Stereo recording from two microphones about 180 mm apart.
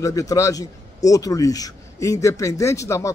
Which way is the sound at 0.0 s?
20° left (ahead or behind).